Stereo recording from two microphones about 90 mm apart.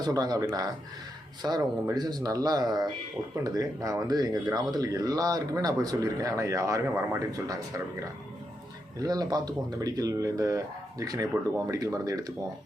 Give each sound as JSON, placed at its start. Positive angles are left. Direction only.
{"t": 0.0, "sound": "speech", "side_deg": -45}